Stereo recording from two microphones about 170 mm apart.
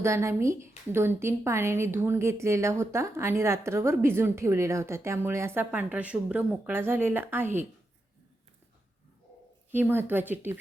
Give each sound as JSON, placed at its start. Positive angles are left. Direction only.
{"t": 0.0, "sound": "a woman's voice", "side_deg": -15}
{"t": 9.7, "sound": "a woman's voice", "side_deg": -10}